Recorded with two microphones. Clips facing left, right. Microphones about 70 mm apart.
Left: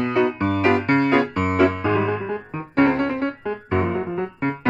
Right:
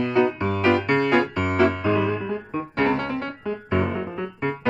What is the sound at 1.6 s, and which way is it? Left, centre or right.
Piano, left.